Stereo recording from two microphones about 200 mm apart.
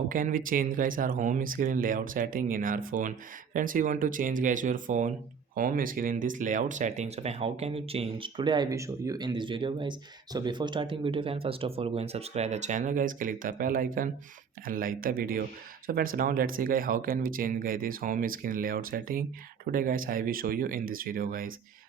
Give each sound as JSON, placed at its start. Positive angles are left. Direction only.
{"t": 0.1, "sound": "speech", "side_deg": -45}